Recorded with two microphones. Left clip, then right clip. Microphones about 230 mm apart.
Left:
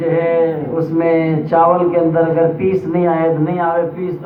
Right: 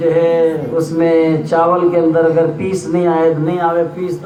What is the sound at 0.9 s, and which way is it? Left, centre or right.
A man's voice, right.